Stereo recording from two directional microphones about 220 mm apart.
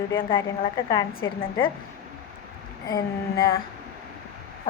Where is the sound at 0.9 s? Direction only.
15° left (ahead or behind).